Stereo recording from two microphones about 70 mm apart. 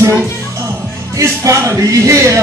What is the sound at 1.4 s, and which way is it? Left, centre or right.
Speech, right.